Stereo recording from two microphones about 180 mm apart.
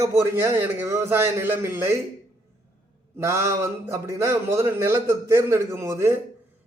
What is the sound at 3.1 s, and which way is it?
A man's voice, 15° right (ahead or behind).